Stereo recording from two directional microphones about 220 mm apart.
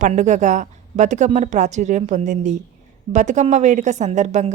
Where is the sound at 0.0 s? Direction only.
35° right (ahead or behind).